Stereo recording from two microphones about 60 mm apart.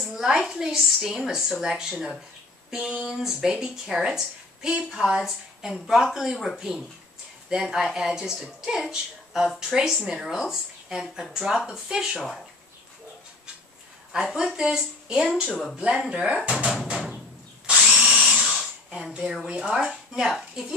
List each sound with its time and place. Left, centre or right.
0.0 s a woman's voice: centre
7.4 s a woman's voice: centre
14.1 s a woman's voice: centre
15.4 s speech: centre
15.7 s a woman's voice: centre
16.7 s music: centre
17.6 s drill: centre
18.4 s a sound: centre
18.9 s a sound: centre
19.4 s a woman's voice: centre